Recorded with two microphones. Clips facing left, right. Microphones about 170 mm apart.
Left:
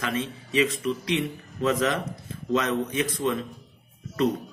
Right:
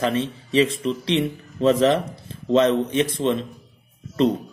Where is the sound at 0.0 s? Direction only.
30° right (ahead or behind).